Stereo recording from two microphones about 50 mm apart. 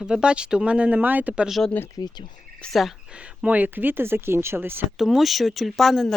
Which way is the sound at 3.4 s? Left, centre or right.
Right.